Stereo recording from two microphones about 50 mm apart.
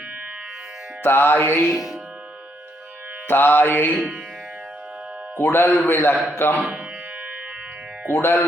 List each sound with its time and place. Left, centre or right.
1.0 s music: left
1.7 s speech: centre
3.2 s music: left
3.9 s music: centre
5.4 s music: left
8.1 s speech: left